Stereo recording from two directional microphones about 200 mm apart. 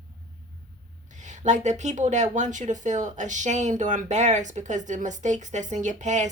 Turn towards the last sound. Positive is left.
turn(degrees=-35)  # may be behind; listen again after turning